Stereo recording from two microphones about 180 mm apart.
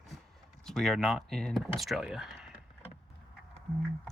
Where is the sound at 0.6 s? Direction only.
Centre (ahead or behind).